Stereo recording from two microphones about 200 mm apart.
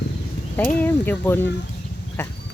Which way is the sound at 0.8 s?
10° left (ahead or behind).